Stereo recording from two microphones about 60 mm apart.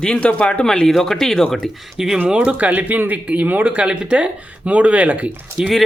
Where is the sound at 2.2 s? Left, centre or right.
Centre.